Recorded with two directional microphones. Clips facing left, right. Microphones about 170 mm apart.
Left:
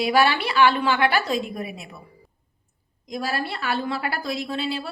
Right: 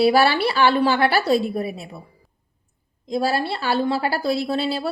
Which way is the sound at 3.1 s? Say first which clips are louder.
Right 6 dB; 30° right (ahead or behind).